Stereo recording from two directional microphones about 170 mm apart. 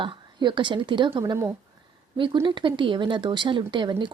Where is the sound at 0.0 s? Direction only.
30° right (ahead or behind).